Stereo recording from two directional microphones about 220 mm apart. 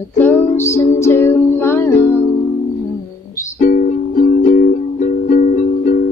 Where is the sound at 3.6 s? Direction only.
35° left (ahead or behind).